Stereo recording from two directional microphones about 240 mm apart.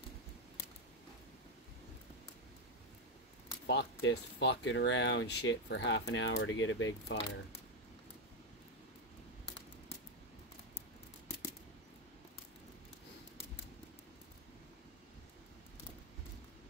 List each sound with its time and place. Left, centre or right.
3.6 s speech: left